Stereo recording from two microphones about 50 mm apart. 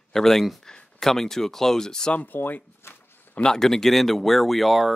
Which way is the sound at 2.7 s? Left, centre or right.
Left.